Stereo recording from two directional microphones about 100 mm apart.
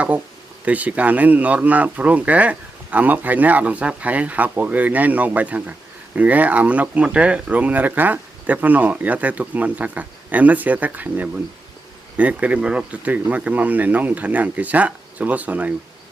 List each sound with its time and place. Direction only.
0.6 s speech: 15° right (ahead or behind)